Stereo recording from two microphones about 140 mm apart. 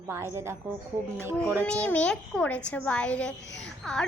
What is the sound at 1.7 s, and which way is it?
A child's voice, 10° left (ahead or behind).